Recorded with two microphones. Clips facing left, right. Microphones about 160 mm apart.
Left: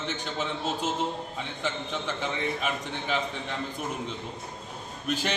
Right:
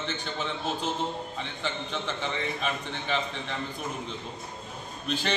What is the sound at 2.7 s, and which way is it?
Speech, 10° left (ahead or behind).